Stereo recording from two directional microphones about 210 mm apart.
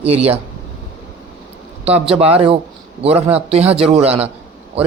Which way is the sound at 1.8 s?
30° right (ahead or behind).